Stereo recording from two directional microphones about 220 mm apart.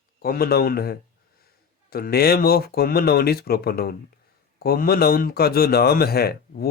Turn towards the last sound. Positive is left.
turn(degrees=45)  # may be behind; listen again after turning